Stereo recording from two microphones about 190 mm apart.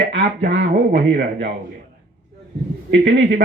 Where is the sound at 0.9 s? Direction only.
55° right (ahead or behind).